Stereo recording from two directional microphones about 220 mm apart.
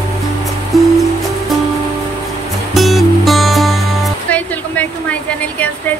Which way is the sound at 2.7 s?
Centre (ahead or behind).